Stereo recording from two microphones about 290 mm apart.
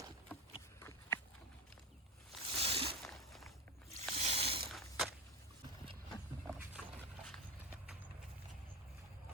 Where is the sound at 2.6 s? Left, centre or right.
Centre.